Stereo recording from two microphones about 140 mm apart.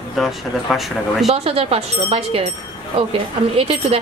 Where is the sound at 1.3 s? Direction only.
45° right (ahead or behind).